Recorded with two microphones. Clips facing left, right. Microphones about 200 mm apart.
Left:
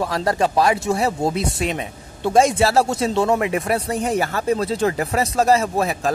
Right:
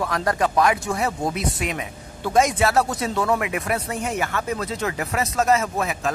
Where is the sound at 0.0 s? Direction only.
30° left (ahead or behind).